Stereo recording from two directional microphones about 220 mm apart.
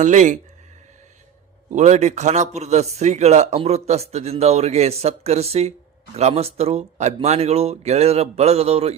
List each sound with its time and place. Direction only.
0.0 s speech: 35° right (ahead or behind)
1.7 s speech: 30° right (ahead or behind)